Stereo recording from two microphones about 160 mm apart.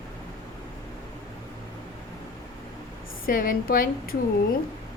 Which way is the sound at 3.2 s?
60° left (ahead or behind).